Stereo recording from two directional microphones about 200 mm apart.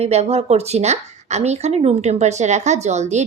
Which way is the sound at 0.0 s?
35° right (ahead or behind).